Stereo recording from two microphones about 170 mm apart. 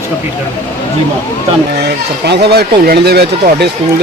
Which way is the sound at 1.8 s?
75° right (ahead or behind).